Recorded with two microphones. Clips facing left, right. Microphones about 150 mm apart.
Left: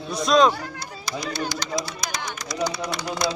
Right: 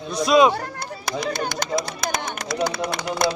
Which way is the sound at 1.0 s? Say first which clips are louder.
Right 3 dB; 55° right (ahead or behind).